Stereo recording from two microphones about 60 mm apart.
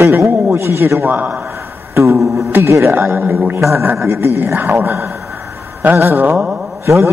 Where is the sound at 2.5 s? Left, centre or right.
Right.